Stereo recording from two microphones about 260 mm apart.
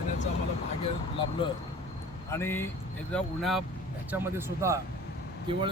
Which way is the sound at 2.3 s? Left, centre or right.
Centre.